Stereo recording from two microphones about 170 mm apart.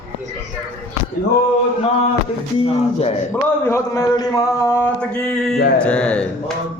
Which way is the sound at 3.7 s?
20° left (ahead or behind).